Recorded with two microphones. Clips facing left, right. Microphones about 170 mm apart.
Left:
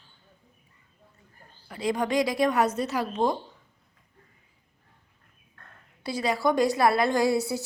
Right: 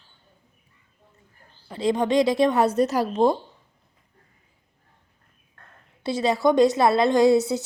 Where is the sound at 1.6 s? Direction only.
25° right (ahead or behind).